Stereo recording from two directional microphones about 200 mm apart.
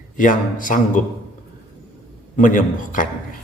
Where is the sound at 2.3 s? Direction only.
40° left (ahead or behind).